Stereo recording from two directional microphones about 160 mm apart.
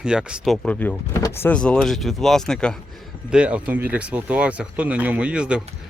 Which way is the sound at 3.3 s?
10° right (ahead or behind).